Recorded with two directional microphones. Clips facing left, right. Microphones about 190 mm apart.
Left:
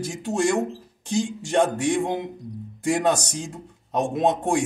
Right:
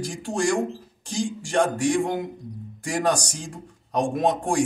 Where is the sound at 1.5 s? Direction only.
20° left (ahead or behind).